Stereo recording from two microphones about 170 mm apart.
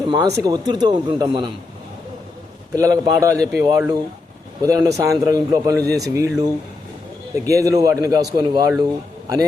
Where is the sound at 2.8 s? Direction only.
20° right (ahead or behind).